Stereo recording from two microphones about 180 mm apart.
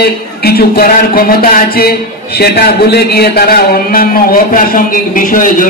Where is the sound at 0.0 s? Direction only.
60° left (ahead or behind).